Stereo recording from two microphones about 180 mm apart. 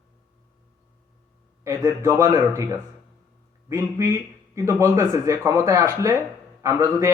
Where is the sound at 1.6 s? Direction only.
15° right (ahead or behind).